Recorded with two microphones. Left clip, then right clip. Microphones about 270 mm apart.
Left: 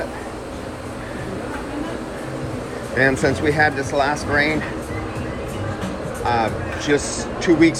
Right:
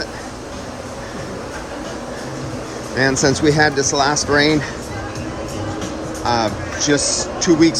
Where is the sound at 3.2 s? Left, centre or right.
Centre.